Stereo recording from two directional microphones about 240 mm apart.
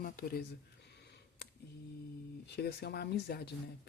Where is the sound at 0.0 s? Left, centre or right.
Left.